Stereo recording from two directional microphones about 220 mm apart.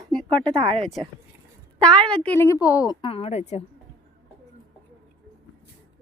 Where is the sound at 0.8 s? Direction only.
Centre (ahead or behind).